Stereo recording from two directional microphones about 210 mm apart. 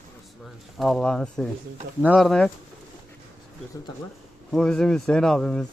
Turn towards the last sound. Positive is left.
turn(degrees=5)  # may be behind; listen again after turning